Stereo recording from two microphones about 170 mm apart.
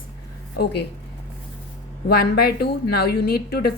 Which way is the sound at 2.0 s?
65° left (ahead or behind).